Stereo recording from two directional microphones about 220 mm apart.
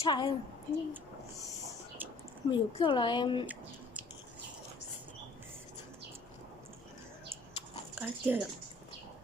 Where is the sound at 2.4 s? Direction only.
20° left (ahead or behind).